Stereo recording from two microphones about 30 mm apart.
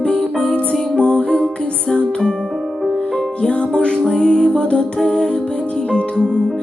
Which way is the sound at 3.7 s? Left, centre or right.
Left.